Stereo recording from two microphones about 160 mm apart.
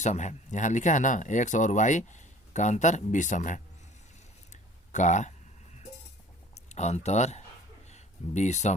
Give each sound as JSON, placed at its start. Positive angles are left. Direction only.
{"t": 0.0, "sound": "speech", "side_deg": 45}
{"t": 4.9, "sound": "speech", "side_deg": 50}
{"t": 6.7, "sound": "speech", "side_deg": 45}
{"t": 7.9, "sound": "a sound", "side_deg": 45}